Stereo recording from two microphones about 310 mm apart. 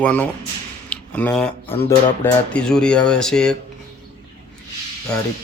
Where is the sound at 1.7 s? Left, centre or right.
Centre.